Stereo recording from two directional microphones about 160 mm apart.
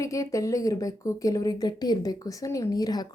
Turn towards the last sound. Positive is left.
turn(degrees=25)  # may be behind; listen again after turning